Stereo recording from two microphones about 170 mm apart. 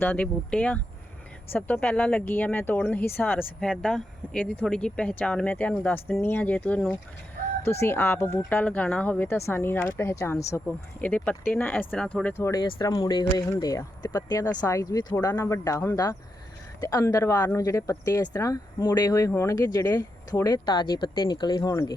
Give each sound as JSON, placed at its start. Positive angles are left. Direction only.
{"t": 0.0, "sound": "speech", "side_deg": 10}